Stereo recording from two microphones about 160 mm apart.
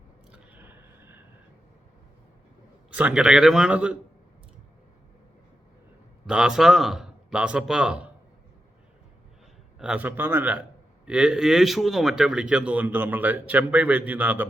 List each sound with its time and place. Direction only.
0.3 s a sound: 10° right (ahead or behind)
2.9 s a man's voice: 5° right (ahead or behind)
6.2 s a man's voice: 5° right (ahead or behind)
9.7 s speech: 5° right (ahead or behind)